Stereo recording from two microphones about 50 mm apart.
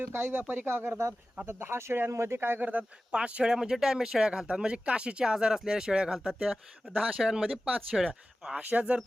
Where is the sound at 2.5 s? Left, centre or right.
Right.